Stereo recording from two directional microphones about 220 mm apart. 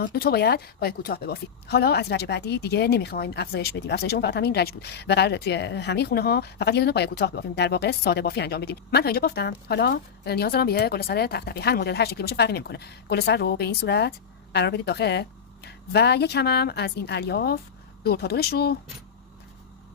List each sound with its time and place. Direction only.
0.0 s a woman's voice: 45° left (ahead or behind)